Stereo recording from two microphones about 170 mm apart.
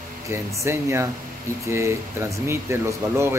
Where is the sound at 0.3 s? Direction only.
15° right (ahead or behind).